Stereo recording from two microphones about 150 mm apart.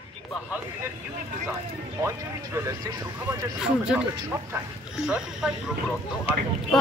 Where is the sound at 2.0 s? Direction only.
20° right (ahead or behind).